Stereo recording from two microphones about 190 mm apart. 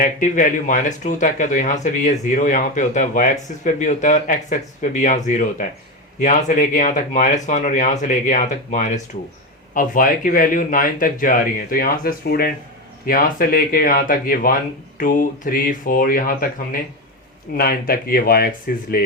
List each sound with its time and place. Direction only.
0.0 s speech: 45° left (ahead or behind)
17.6 s speech: 50° left (ahead or behind)